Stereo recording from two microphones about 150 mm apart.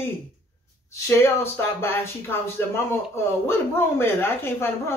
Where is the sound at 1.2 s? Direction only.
15° left (ahead or behind).